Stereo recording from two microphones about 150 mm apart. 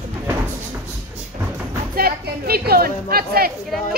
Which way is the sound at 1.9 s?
85° right.